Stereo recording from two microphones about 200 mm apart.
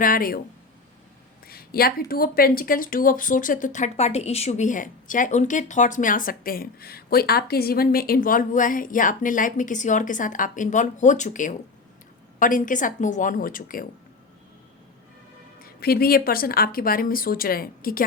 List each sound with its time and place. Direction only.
0.0 s speech: 45° left (ahead or behind)
1.5 s speech: 50° left (ahead or behind)
15.6 s speech: 50° left (ahead or behind)